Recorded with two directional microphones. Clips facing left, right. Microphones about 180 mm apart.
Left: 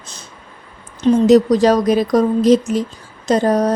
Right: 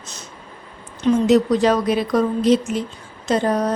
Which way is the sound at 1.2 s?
40° left (ahead or behind).